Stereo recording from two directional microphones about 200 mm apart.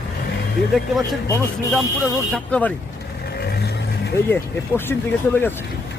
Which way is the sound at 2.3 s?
5° left (ahead or behind).